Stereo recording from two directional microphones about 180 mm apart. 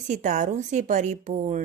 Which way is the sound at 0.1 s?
45° right (ahead or behind).